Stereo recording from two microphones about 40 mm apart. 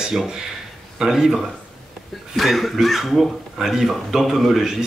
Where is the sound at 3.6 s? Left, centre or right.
Centre.